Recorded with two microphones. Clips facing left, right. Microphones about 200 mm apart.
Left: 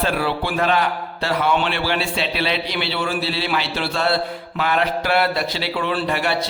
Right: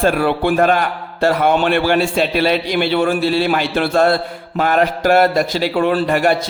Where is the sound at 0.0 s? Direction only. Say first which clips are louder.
Right 7 dB; 50° right (ahead or behind).